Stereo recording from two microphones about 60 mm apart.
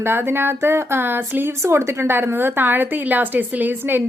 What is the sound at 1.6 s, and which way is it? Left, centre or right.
A woman's voice, right.